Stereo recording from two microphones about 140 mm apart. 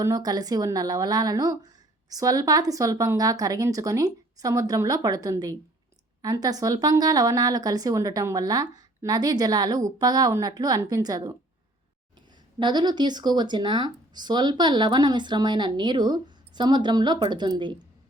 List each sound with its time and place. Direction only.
0.0 s a woman's voice: 25° right (ahead or behind)
12.5 s speech: 30° right (ahead or behind)